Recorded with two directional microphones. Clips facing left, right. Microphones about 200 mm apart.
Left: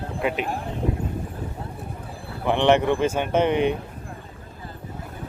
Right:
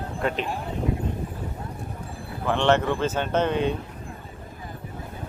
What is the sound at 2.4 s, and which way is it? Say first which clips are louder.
Speech: left 3 dB; 15° left (ahead or behind).